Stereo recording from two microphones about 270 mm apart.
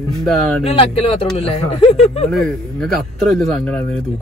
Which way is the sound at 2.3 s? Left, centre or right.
Centre.